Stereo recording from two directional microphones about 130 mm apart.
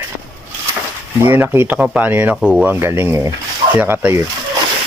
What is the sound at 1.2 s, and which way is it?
Speech, 15° right (ahead or behind).